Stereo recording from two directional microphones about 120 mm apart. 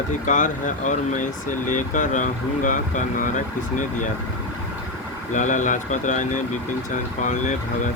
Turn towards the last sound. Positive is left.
turn(degrees=90)